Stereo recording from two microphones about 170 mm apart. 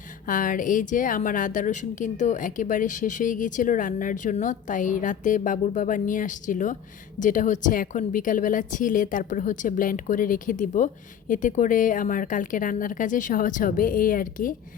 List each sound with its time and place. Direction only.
0.3 s a woman's voice: 50° left (ahead or behind)